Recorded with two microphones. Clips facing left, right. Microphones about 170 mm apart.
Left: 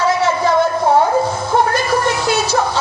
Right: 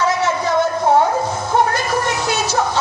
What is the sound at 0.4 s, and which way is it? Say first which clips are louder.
Music: left 2 dB; 20° right (ahead or behind).